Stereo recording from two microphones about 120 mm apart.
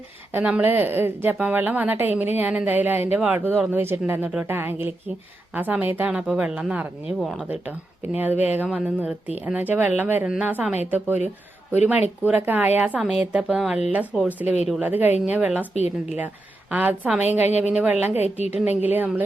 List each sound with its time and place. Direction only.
0.3 s a woman's voice: 15° right (ahead or behind)
15.7 s a woman's voice: 65° left (ahead or behind)
16.7 s a woman's voice: 10° right (ahead or behind)